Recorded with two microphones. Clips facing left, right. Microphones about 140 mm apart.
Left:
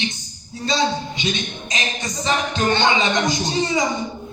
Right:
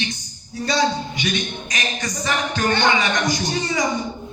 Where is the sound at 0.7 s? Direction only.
25° left (ahead or behind).